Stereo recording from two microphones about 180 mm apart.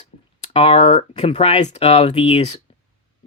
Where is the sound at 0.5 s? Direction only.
30° left (ahead or behind).